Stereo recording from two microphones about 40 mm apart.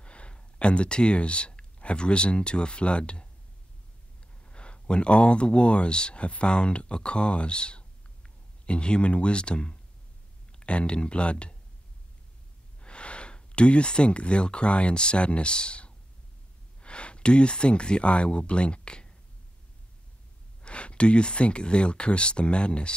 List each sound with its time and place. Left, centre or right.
0.0 s speech: left
4.5 s speech: left
12.8 s speech: left
20.6 s speech: left